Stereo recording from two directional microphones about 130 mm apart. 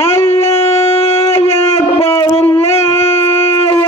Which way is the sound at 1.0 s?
50° left (ahead or behind).